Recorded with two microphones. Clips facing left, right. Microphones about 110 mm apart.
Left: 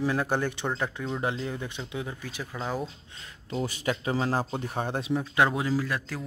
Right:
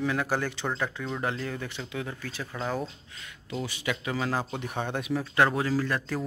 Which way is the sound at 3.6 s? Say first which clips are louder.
Left 3 dB; 45° left (ahead or behind).